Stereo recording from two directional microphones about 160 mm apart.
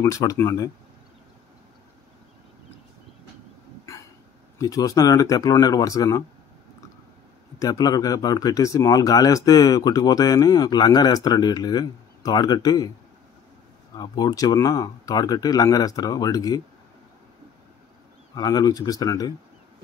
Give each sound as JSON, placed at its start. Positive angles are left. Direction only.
{"t": 0.0, "sound": "speech", "side_deg": 20}
{"t": 3.9, "sound": "a sound", "side_deg": 20}
{"t": 4.6, "sound": "speech", "side_deg": 20}
{"t": 7.5, "sound": "speech", "side_deg": 25}
{"t": 13.9, "sound": "speech", "side_deg": 25}
{"t": 18.3, "sound": "speech", "side_deg": 25}